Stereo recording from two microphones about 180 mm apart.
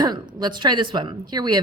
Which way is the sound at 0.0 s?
25° right (ahead or behind).